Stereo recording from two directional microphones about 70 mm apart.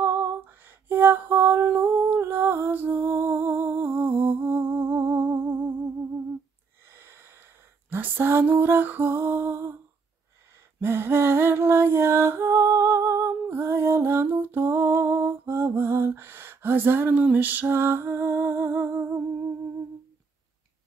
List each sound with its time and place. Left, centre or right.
0.0 s lullaby: right
1.8 s music: right
6.9 s snort: right
7.9 s music: right
10.8 s music: right